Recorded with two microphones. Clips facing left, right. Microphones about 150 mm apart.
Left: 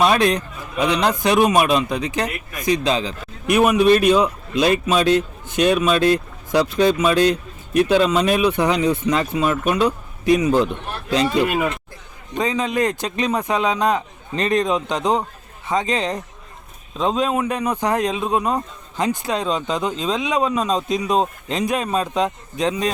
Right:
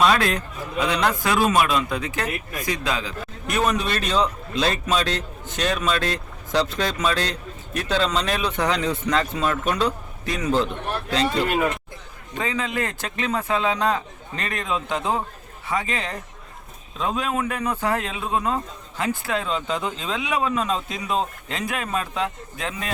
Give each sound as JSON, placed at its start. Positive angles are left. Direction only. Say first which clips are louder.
{"t": 0.0, "sound": "a man's voice", "louder": "left 3 dB", "side_deg": 20}